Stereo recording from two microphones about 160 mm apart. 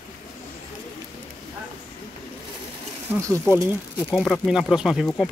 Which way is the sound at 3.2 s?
20° right (ahead or behind).